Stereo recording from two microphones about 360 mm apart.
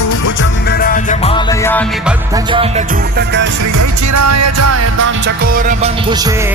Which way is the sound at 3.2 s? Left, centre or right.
Right.